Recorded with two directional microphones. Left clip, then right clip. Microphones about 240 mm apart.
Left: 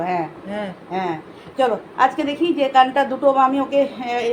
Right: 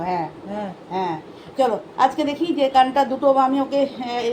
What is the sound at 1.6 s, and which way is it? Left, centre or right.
A woman's voice, right.